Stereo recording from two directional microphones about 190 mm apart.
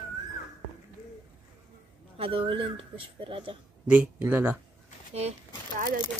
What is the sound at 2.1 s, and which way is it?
Speech, 30° right (ahead or behind).